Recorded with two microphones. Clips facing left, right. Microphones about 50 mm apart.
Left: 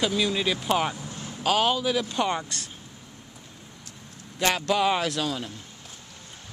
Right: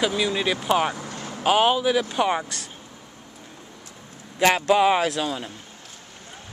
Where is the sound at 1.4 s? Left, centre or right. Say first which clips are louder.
Right 4 dB; centre.